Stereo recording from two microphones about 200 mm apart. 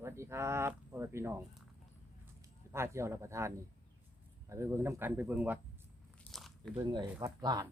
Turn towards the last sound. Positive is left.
turn(degrees=-20)  # may be behind; listen again after turning